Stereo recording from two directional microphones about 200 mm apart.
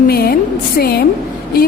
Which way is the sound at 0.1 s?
50° left (ahead or behind).